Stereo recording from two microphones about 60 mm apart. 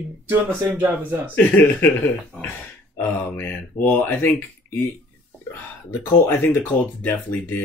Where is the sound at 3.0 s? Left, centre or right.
Left.